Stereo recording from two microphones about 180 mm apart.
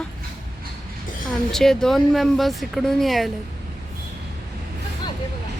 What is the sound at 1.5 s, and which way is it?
Speech, 5° left (ahead or behind).